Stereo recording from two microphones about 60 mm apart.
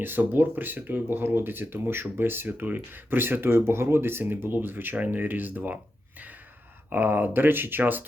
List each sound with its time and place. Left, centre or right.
0.0 s speech: right